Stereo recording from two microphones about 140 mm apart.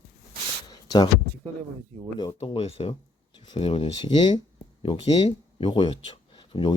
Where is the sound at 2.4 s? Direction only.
45° left (ahead or behind).